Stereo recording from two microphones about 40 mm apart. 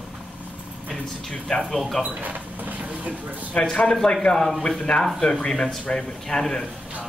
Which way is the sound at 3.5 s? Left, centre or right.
Centre.